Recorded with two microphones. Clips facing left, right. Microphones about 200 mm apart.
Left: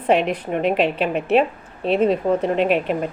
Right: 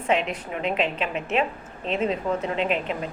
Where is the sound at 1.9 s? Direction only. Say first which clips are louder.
Left 7 dB; 50° left (ahead or behind).